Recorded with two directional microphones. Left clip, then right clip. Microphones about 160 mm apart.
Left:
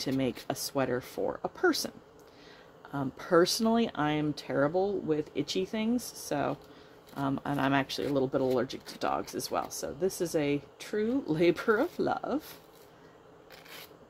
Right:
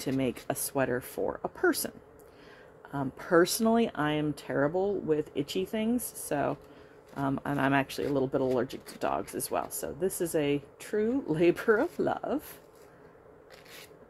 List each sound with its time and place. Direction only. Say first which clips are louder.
0.0 s speech: even; 15° right (ahead or behind)
2.9 s speech: even; 15° right (ahead or behind)